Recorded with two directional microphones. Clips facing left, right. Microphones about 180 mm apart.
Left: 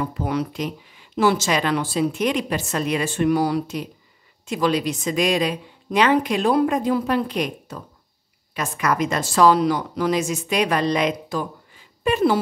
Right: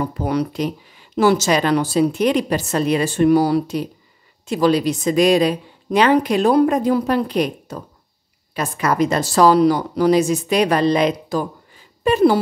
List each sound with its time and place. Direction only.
0.0 s a woman's voice: 40° right (ahead or behind)